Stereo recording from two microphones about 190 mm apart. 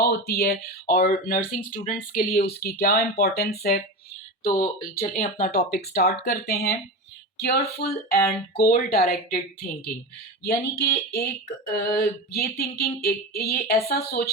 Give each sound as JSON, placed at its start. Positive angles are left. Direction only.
{"t": 0.0, "sound": "speech", "side_deg": 55}
{"t": 5.1, "sound": "speech", "side_deg": 50}
{"t": 10.4, "sound": "a sound", "side_deg": 55}